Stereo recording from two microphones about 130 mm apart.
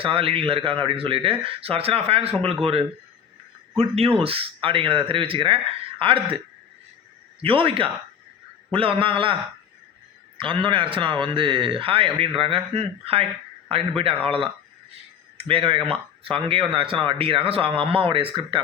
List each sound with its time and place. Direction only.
0.0 s speech: 45° right (ahead or behind)
3.8 s speech: 50° right (ahead or behind)
7.4 s speech: 45° right (ahead or behind)
10.3 s speech: 40° right (ahead or behind)